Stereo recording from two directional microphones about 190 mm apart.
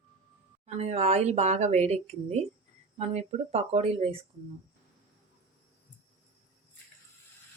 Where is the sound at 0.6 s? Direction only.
35° right (ahead or behind).